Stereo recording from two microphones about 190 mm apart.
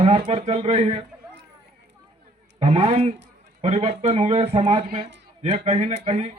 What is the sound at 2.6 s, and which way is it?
Speech, 35° right (ahead or behind).